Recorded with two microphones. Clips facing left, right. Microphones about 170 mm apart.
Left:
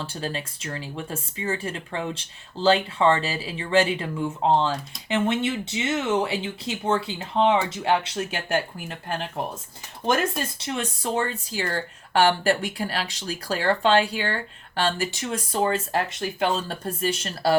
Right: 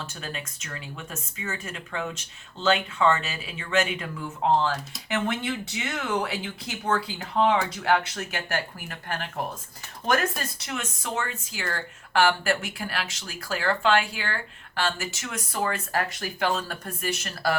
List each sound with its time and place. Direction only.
0.0 s speech: 30° left (ahead or behind)